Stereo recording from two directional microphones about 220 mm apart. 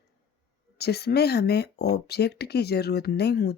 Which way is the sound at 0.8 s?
45° left (ahead or behind).